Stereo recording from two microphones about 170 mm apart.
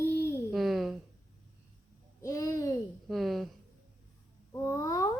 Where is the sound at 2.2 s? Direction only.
20° left (ahead or behind).